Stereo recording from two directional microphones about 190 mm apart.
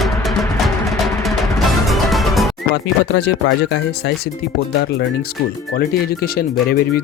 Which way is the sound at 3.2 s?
65° left (ahead or behind).